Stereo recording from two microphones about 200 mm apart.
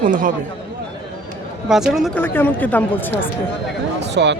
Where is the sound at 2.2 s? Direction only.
10° left (ahead or behind).